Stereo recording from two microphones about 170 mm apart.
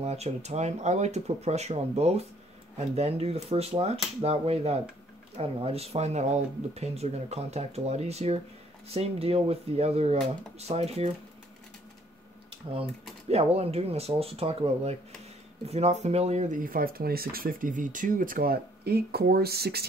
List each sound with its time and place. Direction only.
0.0 s speech: 40° right (ahead or behind)
13.3 s speech: 35° right (ahead or behind); by 19.9 s 65° right (ahead or behind)